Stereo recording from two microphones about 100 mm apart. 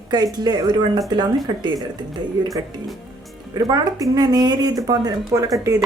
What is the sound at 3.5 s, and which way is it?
Speech, 40° right (ahead or behind).